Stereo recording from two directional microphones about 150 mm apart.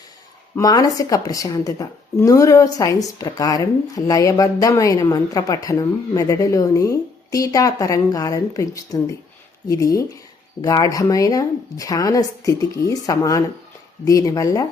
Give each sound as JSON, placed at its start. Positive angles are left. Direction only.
{"t": 0.5, "sound": "a woman's voice", "side_deg": 25}